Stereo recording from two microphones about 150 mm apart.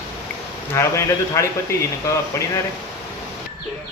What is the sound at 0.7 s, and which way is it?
Speech, 20° left (ahead or behind).